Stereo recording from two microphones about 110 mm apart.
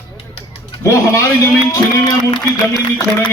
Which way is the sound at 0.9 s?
30° left (ahead or behind).